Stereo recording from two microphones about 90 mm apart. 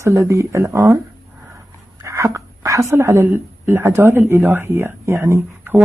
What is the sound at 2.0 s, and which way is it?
A woman's voice, 35° right (ahead or behind).